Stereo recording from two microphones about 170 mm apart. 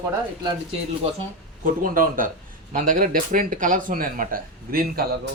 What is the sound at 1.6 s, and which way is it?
Speech, 55° right (ahead or behind).